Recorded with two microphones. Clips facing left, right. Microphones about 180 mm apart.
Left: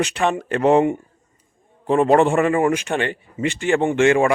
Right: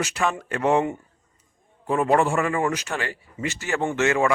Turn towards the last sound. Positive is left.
turn(degrees=25)  # may be behind; listen again after turning